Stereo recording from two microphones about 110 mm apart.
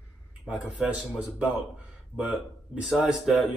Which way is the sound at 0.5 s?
10° right (ahead or behind).